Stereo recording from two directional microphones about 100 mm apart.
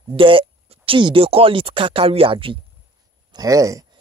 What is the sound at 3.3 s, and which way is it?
Speech, 35° right (ahead or behind).